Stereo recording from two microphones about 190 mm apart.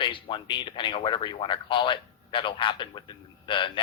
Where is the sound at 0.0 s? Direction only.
25° left (ahead or behind).